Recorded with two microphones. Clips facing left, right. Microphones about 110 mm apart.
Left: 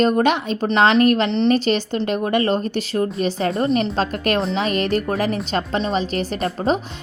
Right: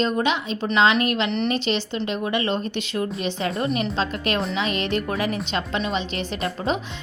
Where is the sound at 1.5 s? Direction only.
45° left (ahead or behind).